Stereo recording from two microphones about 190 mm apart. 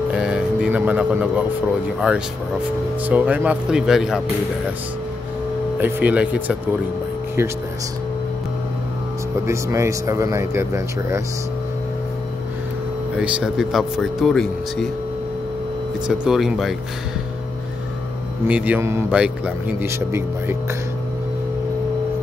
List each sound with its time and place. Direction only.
0.1 s speech: 5° right (ahead or behind)
5.8 s speech: 10° right (ahead or behind)
9.5 s speech: 15° right (ahead or behind)
13.1 s speech: 5° right (ahead or behind)
16.1 s speech: 5° right (ahead or behind)
18.5 s speech: 10° right (ahead or behind)